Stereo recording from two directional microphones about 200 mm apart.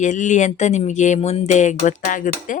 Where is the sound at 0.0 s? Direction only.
40° left (ahead or behind).